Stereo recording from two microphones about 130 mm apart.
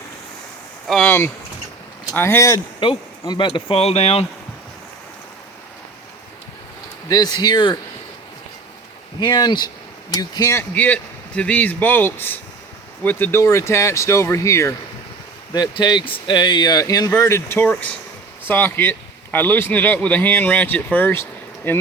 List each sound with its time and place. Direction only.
0.9 s a sound: 5° left (ahead or behind)
2.1 s speech: 20° left (ahead or behind)
2.8 s speech: 40° left (ahead or behind)
7.1 s speech: 30° left (ahead or behind)
9.2 s speech: 30° left (ahead or behind)
15.5 s speech: 35° left (ahead or behind); by 21.8 s 15° left (ahead or behind)